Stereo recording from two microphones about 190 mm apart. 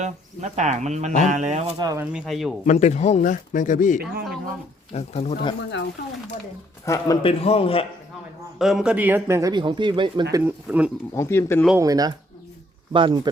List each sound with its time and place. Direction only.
0.0 s speech: 40° right (ahead or behind)
1.8 s speech: 20° right (ahead or behind)
2.1 s speech: centre (ahead or behind)
2.6 s speech: 35° left (ahead or behind)
6.8 s speech: 15° left (ahead or behind)
7.2 s a man's voice: 30° left (ahead or behind)
8.5 s speech: centre (ahead or behind); by 10.2 s 25° right (ahead or behind)
10.3 s speech: 10° right (ahead or behind)
11.1 s speech: 15° left (ahead or behind)
11.8 s speech: 20° right (ahead or behind)